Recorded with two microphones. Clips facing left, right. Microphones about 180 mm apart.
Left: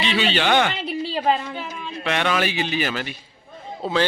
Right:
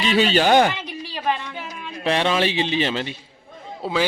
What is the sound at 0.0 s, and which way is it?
Speech, 45° right (ahead or behind).